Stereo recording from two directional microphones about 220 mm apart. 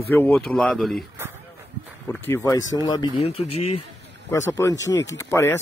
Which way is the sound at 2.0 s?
10° left (ahead or behind).